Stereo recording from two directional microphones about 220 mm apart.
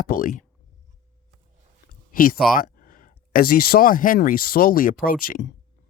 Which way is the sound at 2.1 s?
40° left (ahead or behind).